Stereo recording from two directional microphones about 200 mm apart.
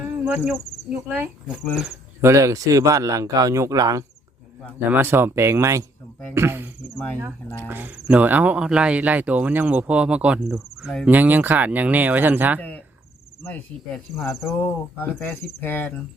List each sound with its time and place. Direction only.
0.3 s speech: 10° right (ahead or behind)
2.2 s speech: 15° right (ahead or behind)
6.9 s cricket: 10° left (ahead or behind)
7.2 s speech: 10° right (ahead or behind)
12.5 s speech: 10° left (ahead or behind)
13.4 s cricket: 10° left (ahead or behind)